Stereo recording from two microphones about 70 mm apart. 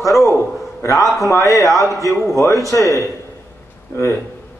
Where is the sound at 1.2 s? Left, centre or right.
Left.